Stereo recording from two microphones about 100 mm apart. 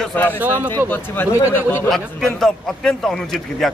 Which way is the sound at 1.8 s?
Centre (ahead or behind).